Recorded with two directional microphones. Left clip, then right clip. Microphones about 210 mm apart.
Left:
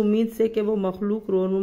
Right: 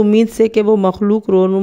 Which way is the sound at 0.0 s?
40° right (ahead or behind).